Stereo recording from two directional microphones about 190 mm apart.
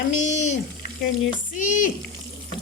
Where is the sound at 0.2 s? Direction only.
40° left (ahead or behind).